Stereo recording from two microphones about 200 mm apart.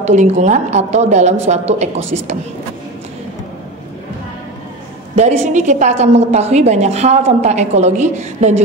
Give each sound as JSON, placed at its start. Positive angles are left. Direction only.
{"t": 0.0, "sound": "a woman's voice", "side_deg": -35}
{"t": 5.1, "sound": "a woman's voice", "side_deg": -35}